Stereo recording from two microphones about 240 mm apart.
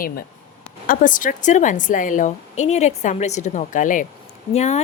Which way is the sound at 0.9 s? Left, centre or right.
Left.